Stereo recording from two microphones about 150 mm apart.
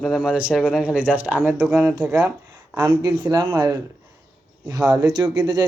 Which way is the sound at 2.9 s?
30° right (ahead or behind).